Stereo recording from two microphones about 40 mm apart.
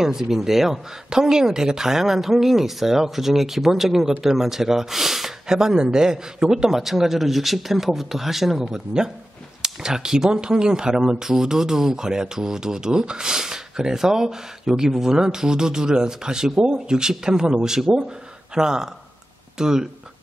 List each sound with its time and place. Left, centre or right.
0.0 s speech: centre
5.5 s speech: centre